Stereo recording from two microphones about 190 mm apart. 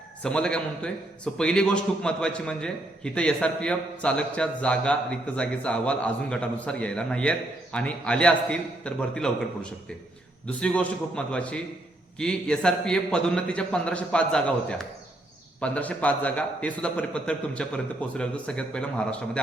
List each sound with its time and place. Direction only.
0.2 s a man's voice: 5° left (ahead or behind)